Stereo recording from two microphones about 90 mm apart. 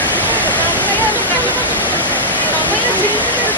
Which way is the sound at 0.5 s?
20° left (ahead or behind).